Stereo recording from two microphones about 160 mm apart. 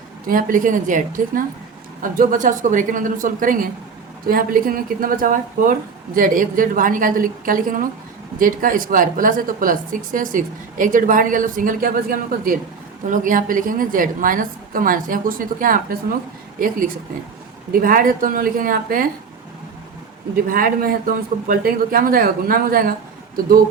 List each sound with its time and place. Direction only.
0.3 s speech: 60° right (ahead or behind)
13.1 s speech: 55° right (ahead or behind)
20.3 s speech: 65° right (ahead or behind)